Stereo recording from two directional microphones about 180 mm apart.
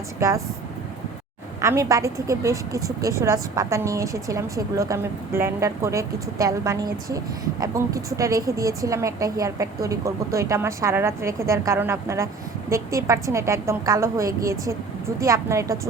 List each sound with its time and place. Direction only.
0.2 s a woman's voice: 15° right (ahead or behind)
1.6 s a woman's voice: 15° right (ahead or behind)